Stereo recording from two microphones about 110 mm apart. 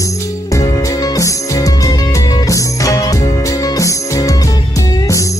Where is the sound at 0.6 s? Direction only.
30° left (ahead or behind).